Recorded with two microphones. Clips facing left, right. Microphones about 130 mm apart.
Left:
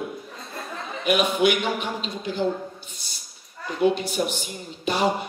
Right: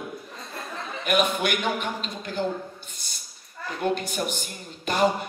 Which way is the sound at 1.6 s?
50° right (ahead or behind).